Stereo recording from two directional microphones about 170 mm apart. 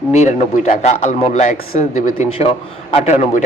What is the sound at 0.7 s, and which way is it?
A man's voice, 45° left (ahead or behind).